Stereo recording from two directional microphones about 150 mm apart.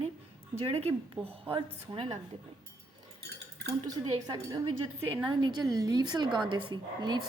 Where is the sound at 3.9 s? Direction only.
25° right (ahead or behind).